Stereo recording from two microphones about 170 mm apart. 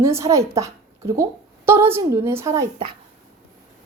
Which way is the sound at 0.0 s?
15° right (ahead or behind).